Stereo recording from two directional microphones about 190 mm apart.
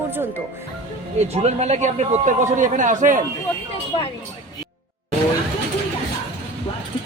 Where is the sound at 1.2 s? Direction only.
35° right (ahead or behind).